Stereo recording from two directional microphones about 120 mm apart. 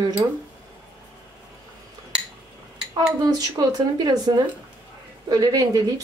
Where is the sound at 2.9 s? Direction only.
35° right (ahead or behind).